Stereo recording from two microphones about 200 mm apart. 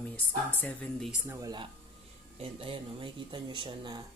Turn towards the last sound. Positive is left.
turn(degrees=-25)  # may be behind; listen again after turning